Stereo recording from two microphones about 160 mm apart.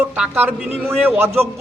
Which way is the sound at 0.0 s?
10° right (ahead or behind).